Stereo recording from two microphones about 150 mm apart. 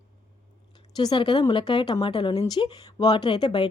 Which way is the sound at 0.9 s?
30° left (ahead or behind).